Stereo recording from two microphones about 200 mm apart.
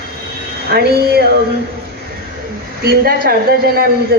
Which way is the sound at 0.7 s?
55° right (ahead or behind).